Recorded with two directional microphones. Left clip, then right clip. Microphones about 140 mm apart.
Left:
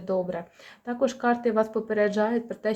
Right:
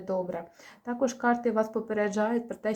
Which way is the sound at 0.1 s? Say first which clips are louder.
Left 4 dB; 25° left (ahead or behind).